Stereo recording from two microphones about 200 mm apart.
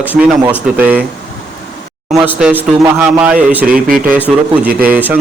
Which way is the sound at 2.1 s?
10° right (ahead or behind).